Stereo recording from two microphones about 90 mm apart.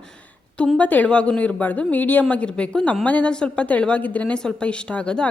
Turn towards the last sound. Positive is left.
turn(degrees=10)  # may be behind; listen again after turning